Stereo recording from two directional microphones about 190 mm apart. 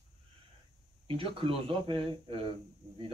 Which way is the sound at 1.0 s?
30° right (ahead or behind).